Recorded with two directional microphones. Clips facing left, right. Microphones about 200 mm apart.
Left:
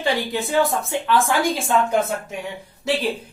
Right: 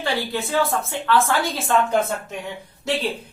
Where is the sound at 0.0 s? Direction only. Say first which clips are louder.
Left 2 dB; 15° left (ahead or behind).